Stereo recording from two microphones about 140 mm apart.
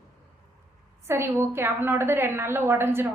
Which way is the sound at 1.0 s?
20° right (ahead or behind).